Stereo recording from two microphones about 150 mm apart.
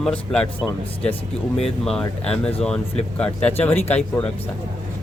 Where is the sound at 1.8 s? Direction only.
5° left (ahead or behind).